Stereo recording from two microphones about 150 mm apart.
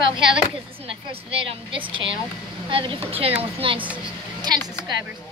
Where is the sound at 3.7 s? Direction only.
10° right (ahead or behind).